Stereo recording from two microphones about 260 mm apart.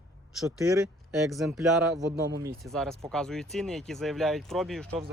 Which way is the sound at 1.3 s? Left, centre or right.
Centre.